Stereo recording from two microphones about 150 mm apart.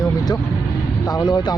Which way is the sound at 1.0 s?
25° left (ahead or behind).